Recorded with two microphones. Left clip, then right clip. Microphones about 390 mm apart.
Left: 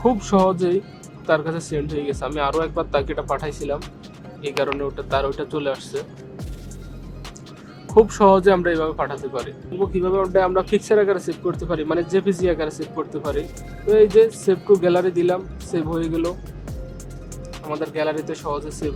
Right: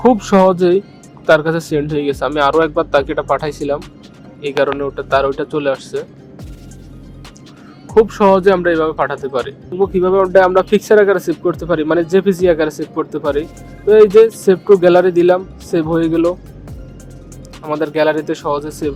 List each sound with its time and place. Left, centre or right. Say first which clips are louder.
0.0 s speech: right 7 dB; centre
7.9 s speech: right 3 dB; centre
17.7 s speech: right 9 dB; centre